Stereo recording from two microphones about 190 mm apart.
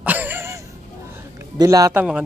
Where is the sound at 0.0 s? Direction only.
10° right (ahead or behind).